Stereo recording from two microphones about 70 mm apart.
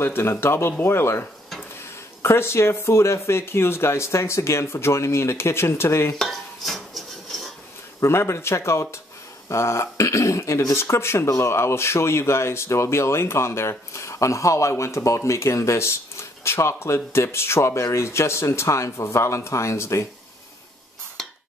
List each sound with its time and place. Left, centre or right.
0.0 s speech: left
2.2 s speech: left
6.1 s dishes: centre
8.0 s speech: left